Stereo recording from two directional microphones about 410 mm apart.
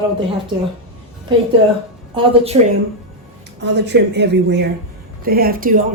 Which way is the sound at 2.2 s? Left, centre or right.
Centre.